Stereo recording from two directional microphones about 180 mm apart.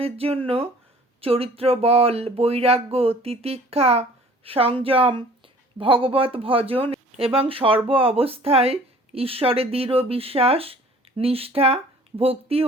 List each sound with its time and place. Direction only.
0.0 s speech: 30° right (ahead or behind)